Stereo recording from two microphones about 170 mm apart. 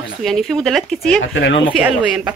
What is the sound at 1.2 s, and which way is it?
Speech, 90° left.